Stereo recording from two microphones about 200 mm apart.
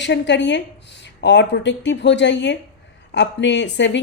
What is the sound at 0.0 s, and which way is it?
Speech, 60° left (ahead or behind).